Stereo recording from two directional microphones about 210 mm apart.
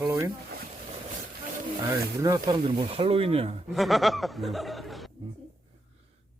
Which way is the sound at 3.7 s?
Centre (ahead or behind).